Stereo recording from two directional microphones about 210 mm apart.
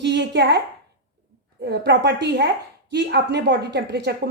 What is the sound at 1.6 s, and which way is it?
A woman's voice, 55° right (ahead or behind).